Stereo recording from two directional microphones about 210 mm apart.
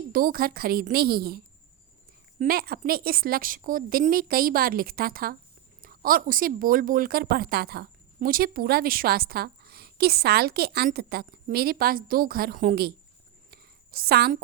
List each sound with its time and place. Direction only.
0.1 s speech: 45° right (ahead or behind)
2.4 s speech: 45° right (ahead or behind)
13.5 s a sound: 45° right (ahead or behind)